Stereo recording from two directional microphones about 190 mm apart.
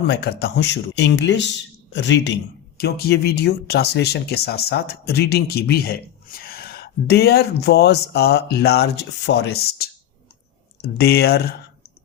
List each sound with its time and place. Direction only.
0.1 s speech: 60° left (ahead or behind)